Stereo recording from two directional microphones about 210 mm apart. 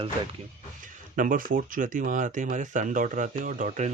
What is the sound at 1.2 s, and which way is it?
Speech, 40° right (ahead or behind).